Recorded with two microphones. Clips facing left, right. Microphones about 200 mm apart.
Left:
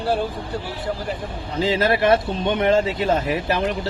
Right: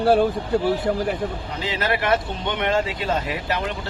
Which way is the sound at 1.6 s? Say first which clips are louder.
Left 6 dB; 30° left (ahead or behind).